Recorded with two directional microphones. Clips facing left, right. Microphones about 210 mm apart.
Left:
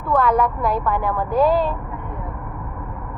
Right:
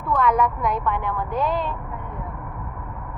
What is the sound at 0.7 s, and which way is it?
Speech, 35° left (ahead or behind).